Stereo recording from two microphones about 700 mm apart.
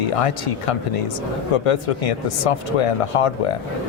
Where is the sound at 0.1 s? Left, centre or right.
Left.